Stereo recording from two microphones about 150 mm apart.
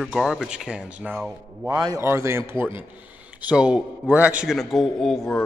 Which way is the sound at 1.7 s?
25° right (ahead or behind).